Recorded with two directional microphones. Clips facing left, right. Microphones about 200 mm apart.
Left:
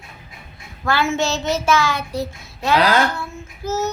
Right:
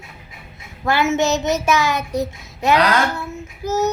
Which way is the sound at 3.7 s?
15° right (ahead or behind).